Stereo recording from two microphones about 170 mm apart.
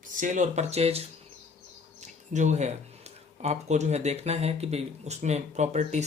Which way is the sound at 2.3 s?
45° right (ahead or behind).